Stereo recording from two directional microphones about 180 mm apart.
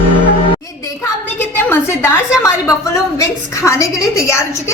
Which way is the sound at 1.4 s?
10° left (ahead or behind).